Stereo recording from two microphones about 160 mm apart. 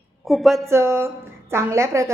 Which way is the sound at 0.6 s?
15° right (ahead or behind).